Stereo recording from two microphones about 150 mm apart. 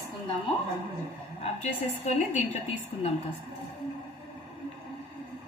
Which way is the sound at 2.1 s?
50° left (ahead or behind).